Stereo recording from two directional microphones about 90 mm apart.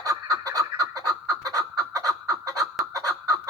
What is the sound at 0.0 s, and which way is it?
Fowl, 40° right (ahead or behind).